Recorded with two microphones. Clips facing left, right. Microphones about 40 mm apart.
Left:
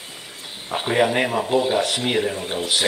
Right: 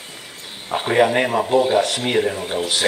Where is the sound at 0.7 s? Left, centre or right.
Centre.